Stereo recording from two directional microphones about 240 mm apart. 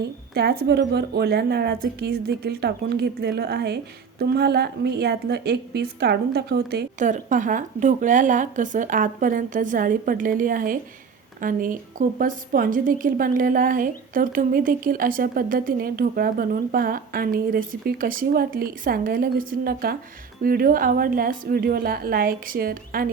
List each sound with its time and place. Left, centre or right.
0.0 s a woman's voice: right